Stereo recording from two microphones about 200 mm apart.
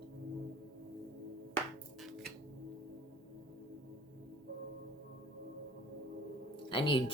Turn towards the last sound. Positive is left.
turn(degrees=25)  # may be behind; listen again after turning